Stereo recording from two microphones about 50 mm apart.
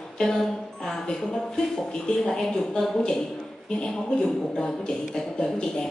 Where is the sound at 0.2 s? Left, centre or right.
Centre.